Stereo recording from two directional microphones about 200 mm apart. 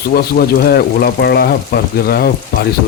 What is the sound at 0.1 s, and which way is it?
Speech, 50° left (ahead or behind).